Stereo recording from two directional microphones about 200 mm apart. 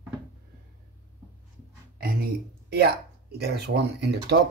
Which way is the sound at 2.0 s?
50° right (ahead or behind).